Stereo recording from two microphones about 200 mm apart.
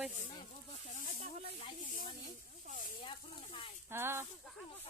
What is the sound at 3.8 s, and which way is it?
Speech, 10° right (ahead or behind).